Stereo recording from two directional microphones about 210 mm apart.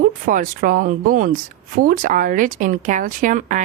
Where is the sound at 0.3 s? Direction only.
40° right (ahead or behind).